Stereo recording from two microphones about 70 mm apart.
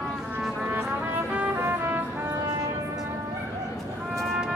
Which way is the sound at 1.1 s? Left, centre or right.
Right.